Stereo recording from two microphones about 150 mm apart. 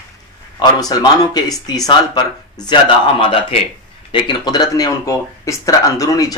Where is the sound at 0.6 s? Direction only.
25° left (ahead or behind).